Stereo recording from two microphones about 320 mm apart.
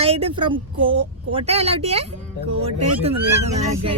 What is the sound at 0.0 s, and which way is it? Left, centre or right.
A woman's voice, centre.